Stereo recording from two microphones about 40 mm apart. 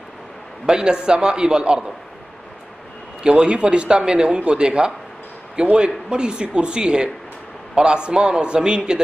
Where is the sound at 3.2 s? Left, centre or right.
Right.